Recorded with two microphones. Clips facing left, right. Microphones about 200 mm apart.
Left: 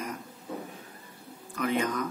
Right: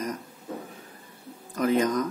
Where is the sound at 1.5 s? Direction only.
40° right (ahead or behind).